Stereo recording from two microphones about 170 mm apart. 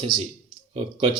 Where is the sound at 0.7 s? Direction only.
35° right (ahead or behind).